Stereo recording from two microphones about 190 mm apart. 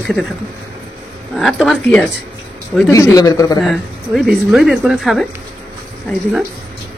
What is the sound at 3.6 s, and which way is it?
A woman's voice, centre (ahead or behind).